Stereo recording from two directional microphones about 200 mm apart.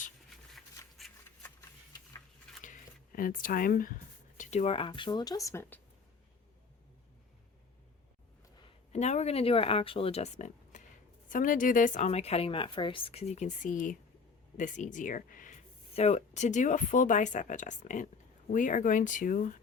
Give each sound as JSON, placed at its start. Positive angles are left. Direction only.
{"t": 0.5, "sound": "a sound", "side_deg": 0}
{"t": 2.6, "sound": "speech", "side_deg": 40}
{"t": 8.9, "sound": "a woman's voice", "side_deg": 35}